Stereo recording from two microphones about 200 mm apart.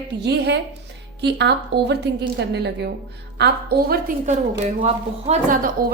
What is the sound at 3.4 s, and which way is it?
Speech, 50° right (ahead or behind).